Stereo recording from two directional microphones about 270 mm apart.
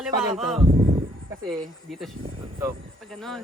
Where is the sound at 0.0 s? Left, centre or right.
Centre.